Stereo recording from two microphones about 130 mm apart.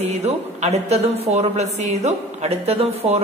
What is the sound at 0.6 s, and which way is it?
A woman's voice, 55° right (ahead or behind).